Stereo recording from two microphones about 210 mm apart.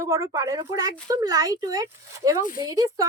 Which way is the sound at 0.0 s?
15° right (ahead or behind).